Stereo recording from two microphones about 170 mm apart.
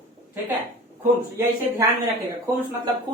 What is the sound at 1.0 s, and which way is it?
Speech, 15° right (ahead or behind).